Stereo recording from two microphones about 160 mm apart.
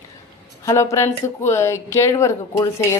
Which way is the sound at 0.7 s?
20° left (ahead or behind).